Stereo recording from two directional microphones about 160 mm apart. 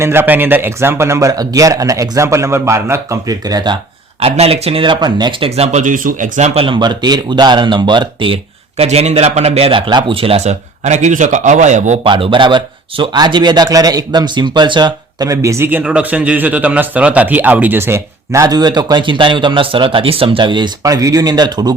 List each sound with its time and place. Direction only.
0.0 s speech: 15° right (ahead or behind)
4.2 s speech: 40° right (ahead or behind)
5.5 s speech: 40° right (ahead or behind)
8.8 s speech: 40° right (ahead or behind)
12.0 s speech: 30° right (ahead or behind)